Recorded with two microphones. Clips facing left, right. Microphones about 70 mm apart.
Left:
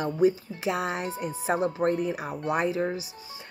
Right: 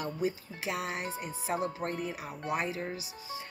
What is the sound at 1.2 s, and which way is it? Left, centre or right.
Speech, left.